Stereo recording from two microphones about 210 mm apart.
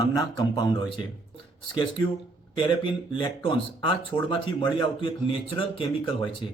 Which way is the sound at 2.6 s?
25° left (ahead or behind).